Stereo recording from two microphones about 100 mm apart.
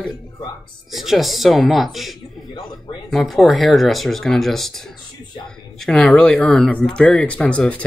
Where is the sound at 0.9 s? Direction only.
Centre (ahead or behind).